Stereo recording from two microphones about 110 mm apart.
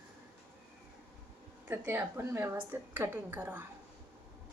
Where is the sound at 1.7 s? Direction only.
20° right (ahead or behind).